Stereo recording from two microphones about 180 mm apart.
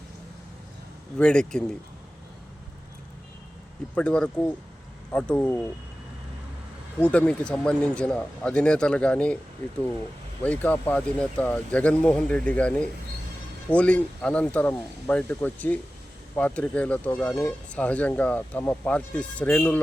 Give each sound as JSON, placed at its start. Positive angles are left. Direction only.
{"t": 1.2, "sound": "speech", "side_deg": 5}
{"t": 3.9, "sound": "speech", "side_deg": 5}
{"t": 7.0, "sound": "speech", "side_deg": 5}
{"t": 10.4, "sound": "speech", "side_deg": 10}